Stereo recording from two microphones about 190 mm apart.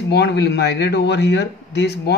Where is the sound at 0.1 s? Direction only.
60° left (ahead or behind).